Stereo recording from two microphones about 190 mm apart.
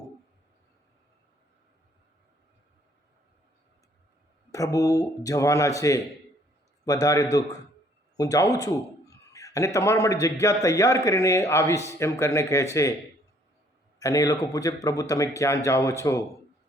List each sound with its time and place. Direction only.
4.5 s a man's voice: 20° left (ahead or behind)
14.0 s a man's voice: 20° left (ahead or behind)